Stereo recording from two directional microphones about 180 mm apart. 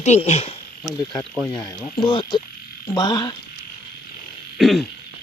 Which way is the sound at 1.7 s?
30° left (ahead or behind).